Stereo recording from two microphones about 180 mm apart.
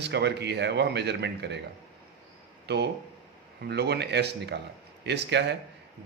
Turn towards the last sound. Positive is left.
turn(degrees=-75)  # may be behind; listen again after turning